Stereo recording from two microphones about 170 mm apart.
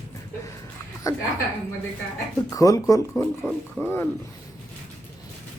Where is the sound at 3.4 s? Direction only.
Centre (ahead or behind).